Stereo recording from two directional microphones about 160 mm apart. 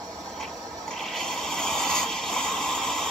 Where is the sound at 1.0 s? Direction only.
Centre (ahead or behind).